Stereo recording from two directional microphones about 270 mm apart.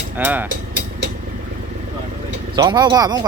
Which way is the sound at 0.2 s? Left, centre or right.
Centre.